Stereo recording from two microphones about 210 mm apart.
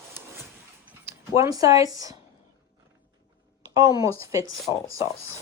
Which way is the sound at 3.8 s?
15° right (ahead or behind).